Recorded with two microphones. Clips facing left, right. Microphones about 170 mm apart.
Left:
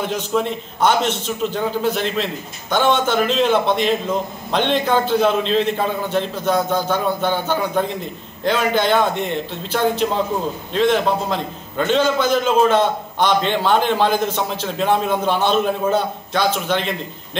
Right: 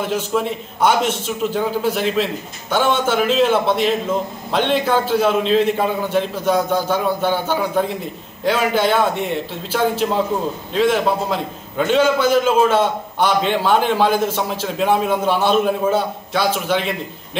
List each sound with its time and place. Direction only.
0.0 s a man's voice: 5° right (ahead or behind)